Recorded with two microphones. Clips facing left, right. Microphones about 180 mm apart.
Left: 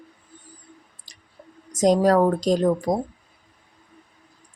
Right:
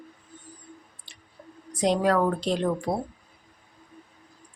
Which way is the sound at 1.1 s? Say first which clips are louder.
Right 1 dB; 40° left (ahead or behind).